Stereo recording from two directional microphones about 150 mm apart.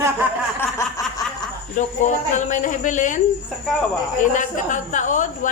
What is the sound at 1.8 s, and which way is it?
Speech, 55° left (ahead or behind).